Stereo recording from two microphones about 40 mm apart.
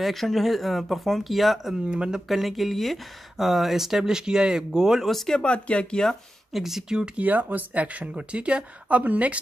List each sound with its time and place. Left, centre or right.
0.0 s speech: centre
1.9 s speech: right
2.2 s speech: centre
5.0 s speech: centre
5.4 s speech: left
6.5 s speech: centre
7.2 s speech: right